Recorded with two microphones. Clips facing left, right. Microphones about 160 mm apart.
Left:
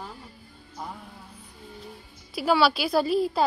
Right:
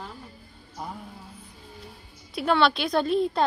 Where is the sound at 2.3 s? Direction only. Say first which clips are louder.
Even; 5° left (ahead or behind).